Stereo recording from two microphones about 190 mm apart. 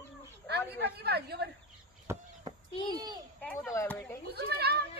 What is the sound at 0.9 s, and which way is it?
Speech, 55° right (ahead or behind).